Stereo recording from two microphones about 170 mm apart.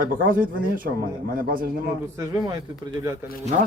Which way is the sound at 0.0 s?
55° right (ahead or behind).